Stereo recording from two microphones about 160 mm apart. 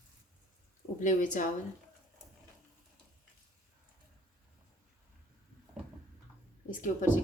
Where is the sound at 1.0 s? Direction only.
55° left (ahead or behind).